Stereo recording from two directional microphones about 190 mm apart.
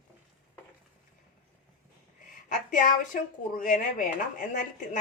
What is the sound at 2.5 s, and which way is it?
Speech, 40° left (ahead or behind).